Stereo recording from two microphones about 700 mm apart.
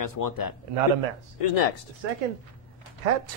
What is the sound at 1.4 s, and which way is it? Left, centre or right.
Speech, left.